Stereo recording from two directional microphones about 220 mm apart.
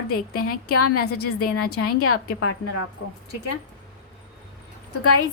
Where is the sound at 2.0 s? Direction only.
80° left.